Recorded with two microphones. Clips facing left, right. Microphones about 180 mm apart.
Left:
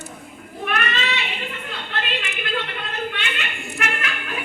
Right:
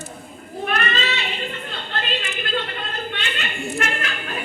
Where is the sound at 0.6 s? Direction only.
35° right (ahead or behind).